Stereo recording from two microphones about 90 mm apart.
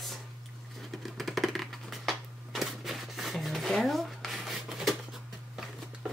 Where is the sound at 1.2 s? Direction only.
Centre (ahead or behind).